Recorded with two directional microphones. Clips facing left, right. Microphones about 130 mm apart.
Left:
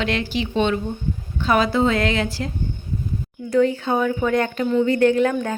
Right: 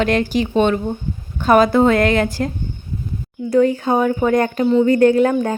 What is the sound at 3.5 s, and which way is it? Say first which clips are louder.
Speech: right 3 dB; 40° right (ahead or behind).